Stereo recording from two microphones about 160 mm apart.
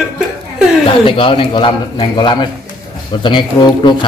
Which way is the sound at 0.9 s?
35° left (ahead or behind).